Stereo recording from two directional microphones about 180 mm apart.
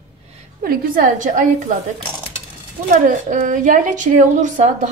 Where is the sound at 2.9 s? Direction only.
45° right (ahead or behind).